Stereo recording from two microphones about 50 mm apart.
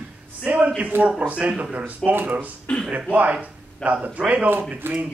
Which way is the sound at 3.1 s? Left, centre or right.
Right.